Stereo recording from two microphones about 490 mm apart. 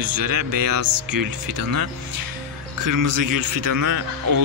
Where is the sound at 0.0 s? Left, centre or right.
Right.